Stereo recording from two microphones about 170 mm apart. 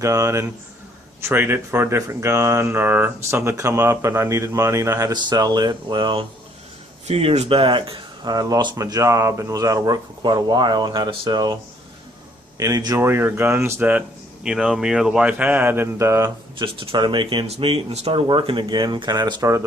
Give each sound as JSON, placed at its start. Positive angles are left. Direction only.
{"t": 0.0, "sound": "speech", "side_deg": -20}
{"t": 12.5, "sound": "speech", "side_deg": -20}
{"t": 16.7, "sound": "speech", "side_deg": -30}